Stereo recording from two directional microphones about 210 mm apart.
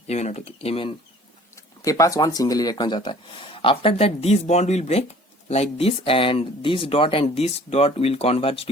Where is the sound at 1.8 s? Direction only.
15° left (ahead or behind).